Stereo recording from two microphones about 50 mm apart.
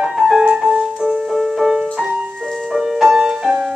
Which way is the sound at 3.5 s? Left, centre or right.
Centre.